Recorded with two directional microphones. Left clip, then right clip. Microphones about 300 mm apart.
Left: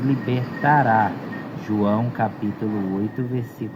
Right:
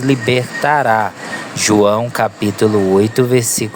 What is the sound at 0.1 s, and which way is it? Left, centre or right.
Speech, right.